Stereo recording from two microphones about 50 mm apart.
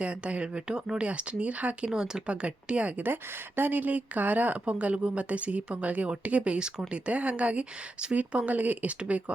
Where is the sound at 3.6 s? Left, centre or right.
Right.